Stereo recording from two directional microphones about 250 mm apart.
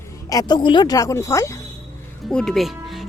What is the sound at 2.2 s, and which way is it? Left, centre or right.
Speech, centre.